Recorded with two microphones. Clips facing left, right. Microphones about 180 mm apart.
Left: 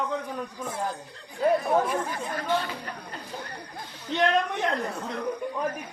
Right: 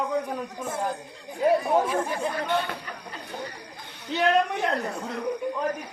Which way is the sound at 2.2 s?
60° right (ahead or behind).